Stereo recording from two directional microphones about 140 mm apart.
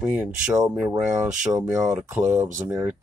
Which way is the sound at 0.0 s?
10° right (ahead or behind).